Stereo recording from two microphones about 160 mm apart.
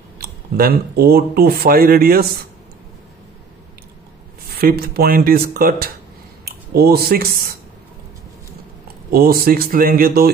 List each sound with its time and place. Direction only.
0.2 s speech: 70° right (ahead or behind)
4.6 s speech: 70° right (ahead or behind)
9.1 s speech: 70° right (ahead or behind)